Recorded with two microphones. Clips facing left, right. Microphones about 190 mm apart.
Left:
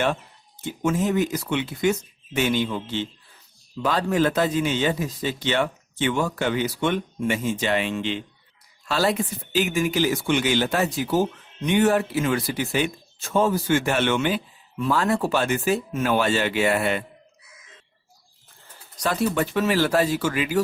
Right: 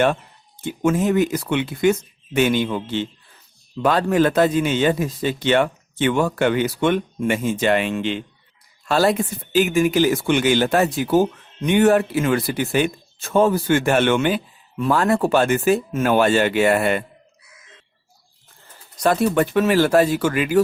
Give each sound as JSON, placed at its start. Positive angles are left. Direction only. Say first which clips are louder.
{"t": 0.6, "sound": "speech", "louder": "right 4 dB", "side_deg": -60}
{"t": 18.9, "sound": "speech", "louder": "right 5 dB", "side_deg": -55}